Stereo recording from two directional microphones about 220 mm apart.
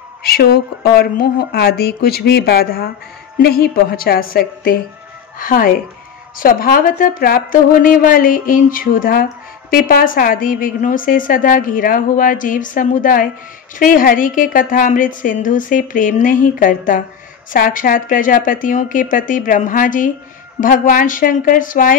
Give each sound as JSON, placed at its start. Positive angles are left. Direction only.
{"t": 0.3, "sound": "a woman's voice", "side_deg": 45}